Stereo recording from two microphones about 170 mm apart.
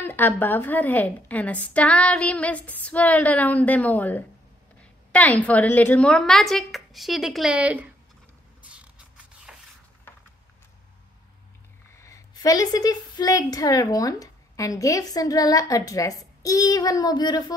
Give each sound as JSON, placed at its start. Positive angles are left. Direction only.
{"t": 0.0, "sound": "a woman's voice", "side_deg": 10}
{"t": 8.6, "sound": "a sound", "side_deg": -5}
{"t": 12.0, "sound": "a woman's voice", "side_deg": 20}